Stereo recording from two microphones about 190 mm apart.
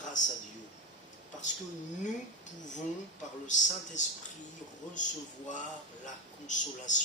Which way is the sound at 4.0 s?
40° left (ahead or behind).